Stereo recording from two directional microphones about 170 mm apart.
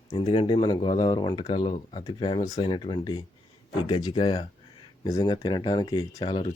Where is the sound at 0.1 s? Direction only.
30° left (ahead or behind).